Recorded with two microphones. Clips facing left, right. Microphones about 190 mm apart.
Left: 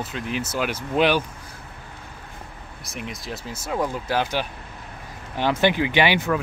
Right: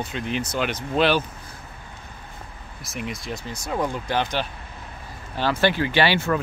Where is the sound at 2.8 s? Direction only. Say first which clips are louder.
Right 2 dB; centre (ahead or behind); by 6.3 s 15° left (ahead or behind).